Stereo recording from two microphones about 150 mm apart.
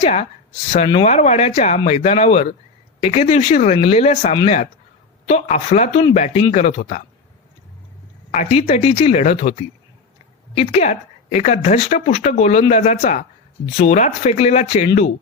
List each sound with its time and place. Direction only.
0.0 s a woman's voice: 50° left (ahead or behind)
8.3 s a woman's voice: 45° left (ahead or behind)